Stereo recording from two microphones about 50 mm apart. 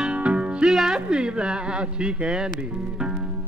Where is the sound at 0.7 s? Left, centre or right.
Centre.